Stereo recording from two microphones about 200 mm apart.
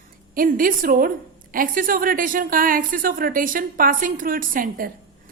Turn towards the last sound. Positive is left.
turn(degrees=-45)  # may be behind; listen again after turning